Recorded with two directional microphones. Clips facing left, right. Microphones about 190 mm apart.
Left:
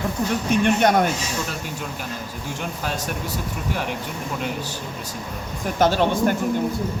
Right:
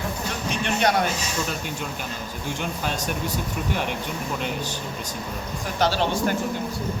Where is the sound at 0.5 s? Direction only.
50° left (ahead or behind).